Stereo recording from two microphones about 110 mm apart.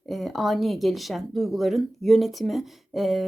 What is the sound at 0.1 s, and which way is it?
Speech, centre (ahead or behind).